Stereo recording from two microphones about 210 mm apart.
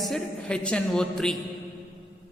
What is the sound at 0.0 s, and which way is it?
Speech, 5° left (ahead or behind).